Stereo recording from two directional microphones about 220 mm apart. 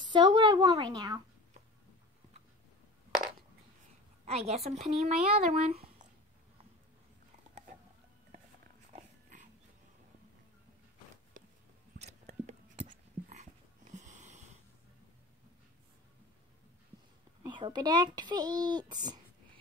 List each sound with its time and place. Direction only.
0.1 s a woman's voice: 20° right (ahead or behind)
4.3 s a woman's voice: 30° right (ahead or behind)
8.9 s dog: 35° right (ahead or behind)
12.3 s a sound: 35° right (ahead or behind)
13.9 s wheeze: 30° right (ahead or behind)
17.4 s a child's voice: 20° right (ahead or behind)